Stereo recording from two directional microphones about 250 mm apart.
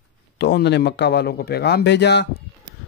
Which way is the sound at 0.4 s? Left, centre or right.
Left.